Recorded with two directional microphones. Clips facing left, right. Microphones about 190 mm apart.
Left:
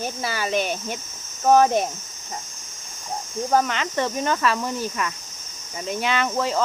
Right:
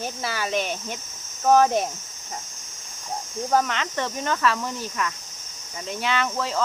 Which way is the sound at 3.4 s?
5° left (ahead or behind).